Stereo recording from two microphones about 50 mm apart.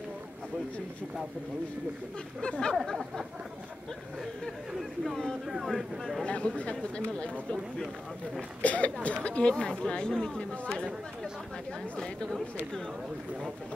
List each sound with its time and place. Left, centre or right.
2.4 s speech: centre
4.7 s speech: centre
6.2 s speech: left
8.4 s speech: left
12.0 s speech: centre